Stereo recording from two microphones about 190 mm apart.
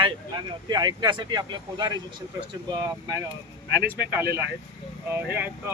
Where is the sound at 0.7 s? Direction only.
20° right (ahead or behind).